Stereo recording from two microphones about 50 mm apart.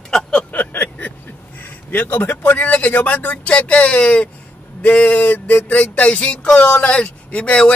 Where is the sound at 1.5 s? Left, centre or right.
Left.